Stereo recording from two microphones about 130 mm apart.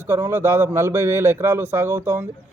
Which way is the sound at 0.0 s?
20° right (ahead or behind).